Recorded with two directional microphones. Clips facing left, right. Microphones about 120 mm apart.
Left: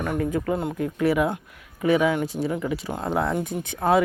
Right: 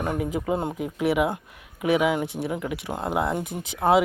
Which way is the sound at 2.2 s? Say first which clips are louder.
Left 3 dB; 65° right (ahead or behind).